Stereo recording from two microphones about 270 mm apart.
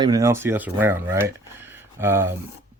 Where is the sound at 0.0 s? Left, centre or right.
Centre.